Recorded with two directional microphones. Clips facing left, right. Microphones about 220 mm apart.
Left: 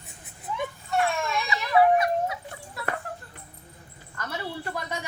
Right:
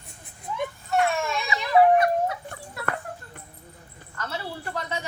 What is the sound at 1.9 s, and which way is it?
Dog, 55° right (ahead or behind).